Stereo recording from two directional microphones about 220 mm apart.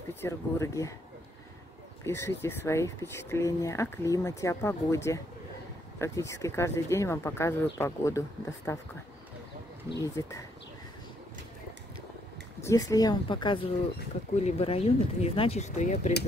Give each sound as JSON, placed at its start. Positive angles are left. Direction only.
{"t": 0.1, "sound": "speech", "side_deg": 10}
{"t": 2.0, "sound": "speech", "side_deg": 10}
{"t": 9.8, "sound": "speech", "side_deg": 15}
{"t": 12.6, "sound": "speech", "side_deg": 15}